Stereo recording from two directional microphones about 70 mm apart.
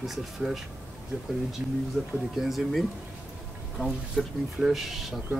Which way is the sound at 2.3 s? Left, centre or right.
Centre.